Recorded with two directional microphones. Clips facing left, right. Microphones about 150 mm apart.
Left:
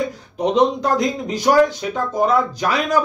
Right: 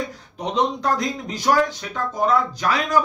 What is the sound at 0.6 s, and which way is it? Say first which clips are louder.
Speech: left 4 dB; 15° left (ahead or behind).